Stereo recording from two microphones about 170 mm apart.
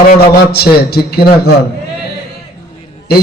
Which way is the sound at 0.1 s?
70° left (ahead or behind).